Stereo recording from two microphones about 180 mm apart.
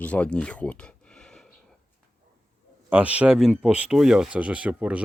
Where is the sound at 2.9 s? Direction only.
5° right (ahead or behind).